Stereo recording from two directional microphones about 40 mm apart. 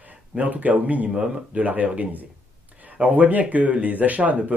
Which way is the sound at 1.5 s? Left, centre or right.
Right.